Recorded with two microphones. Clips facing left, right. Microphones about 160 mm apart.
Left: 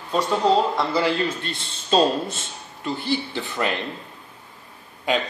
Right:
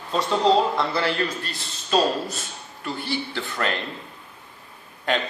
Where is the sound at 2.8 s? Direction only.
15° left (ahead or behind).